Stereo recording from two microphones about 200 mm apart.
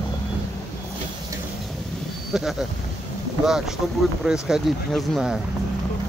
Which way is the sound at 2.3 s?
Centre (ahead or behind).